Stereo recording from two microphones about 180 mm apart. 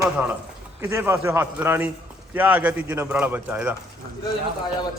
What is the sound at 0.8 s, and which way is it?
A man's voice, 15° right (ahead or behind).